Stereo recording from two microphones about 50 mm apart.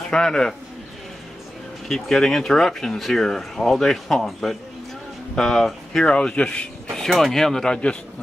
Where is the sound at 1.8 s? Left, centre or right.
Centre.